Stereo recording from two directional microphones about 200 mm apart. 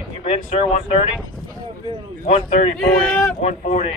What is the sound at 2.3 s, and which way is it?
Speech, 35° left (ahead or behind).